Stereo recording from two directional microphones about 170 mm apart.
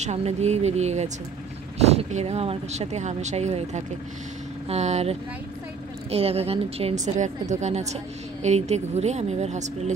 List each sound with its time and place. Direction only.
0.0 s a woman's voice: 40° right (ahead or behind)